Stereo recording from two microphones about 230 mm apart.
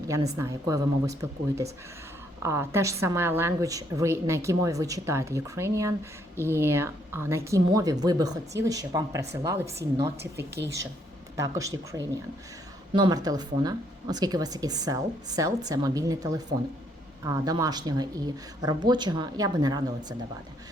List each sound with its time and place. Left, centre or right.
0.1 s a woman's voice: centre
10.3 s speech: right
11.3 s a woman's voice: centre